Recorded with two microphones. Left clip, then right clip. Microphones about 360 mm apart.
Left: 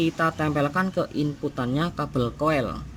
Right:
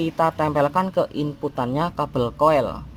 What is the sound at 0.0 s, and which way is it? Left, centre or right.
Speech, centre.